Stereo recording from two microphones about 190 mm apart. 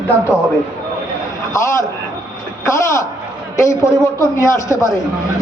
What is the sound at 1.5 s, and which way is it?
A man's voice, 15° left (ahead or behind).